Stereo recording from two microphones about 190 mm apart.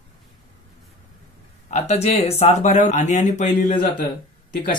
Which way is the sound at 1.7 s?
35° left (ahead or behind).